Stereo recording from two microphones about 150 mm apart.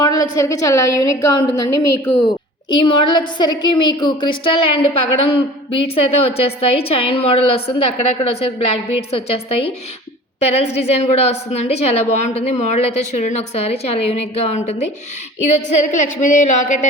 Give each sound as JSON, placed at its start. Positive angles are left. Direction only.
{"t": 0.0, "sound": "a woman's voice", "side_deg": 20}